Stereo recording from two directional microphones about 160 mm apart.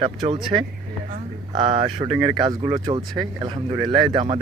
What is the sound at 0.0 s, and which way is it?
Speech, 30° right (ahead or behind).